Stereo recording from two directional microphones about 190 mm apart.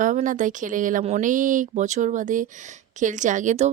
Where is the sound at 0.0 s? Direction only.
40° right (ahead or behind).